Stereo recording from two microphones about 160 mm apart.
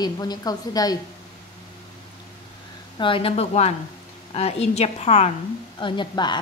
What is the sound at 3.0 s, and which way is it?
A woman's voice, 35° left (ahead or behind).